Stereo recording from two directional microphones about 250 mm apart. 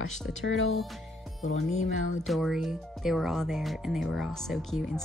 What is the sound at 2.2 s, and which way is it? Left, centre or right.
Speech, centre.